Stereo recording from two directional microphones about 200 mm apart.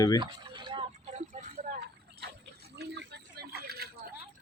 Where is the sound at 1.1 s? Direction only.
35° right (ahead or behind).